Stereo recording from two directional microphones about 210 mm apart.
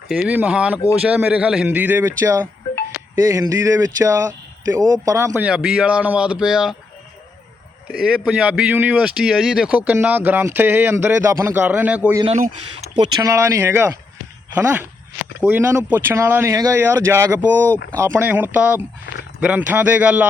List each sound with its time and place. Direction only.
0.1 s speech: 5° right (ahead or behind)
7.9 s speech: 5° right (ahead or behind)
12.2 s speech: 30° right (ahead or behind)
13.0 s speech: 15° right (ahead or behind)